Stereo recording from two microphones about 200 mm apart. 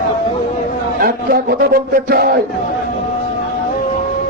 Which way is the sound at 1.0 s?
50° right (ahead or behind).